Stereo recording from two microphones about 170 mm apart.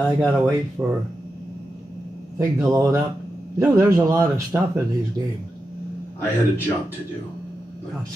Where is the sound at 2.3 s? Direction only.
20° right (ahead or behind).